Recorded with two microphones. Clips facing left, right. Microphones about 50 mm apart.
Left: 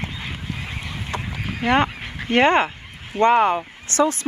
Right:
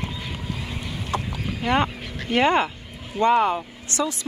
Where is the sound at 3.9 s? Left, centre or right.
Left.